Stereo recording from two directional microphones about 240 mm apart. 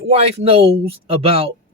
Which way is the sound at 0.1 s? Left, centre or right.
Right.